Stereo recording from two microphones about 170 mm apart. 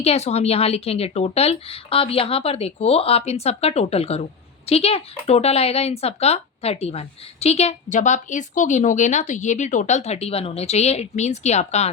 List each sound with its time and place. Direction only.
0.0 s a woman's voice: 35° left (ahead or behind)